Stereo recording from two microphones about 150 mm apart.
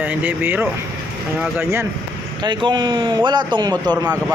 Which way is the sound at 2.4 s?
30° right (ahead or behind).